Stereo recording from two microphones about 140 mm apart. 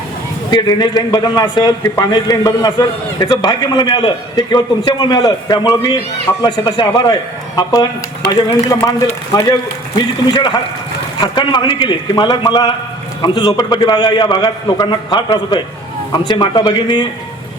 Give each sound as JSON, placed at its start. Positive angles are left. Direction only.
{"t": 0.5, "sound": "a man's voice", "side_deg": 30}